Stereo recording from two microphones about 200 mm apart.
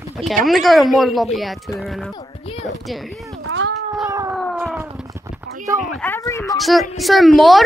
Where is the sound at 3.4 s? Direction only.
65° right (ahead or behind).